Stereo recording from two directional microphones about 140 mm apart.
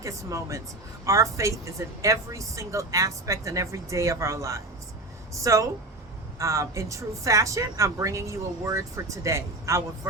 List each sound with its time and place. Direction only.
0.0 s speech: 20° right (ahead or behind)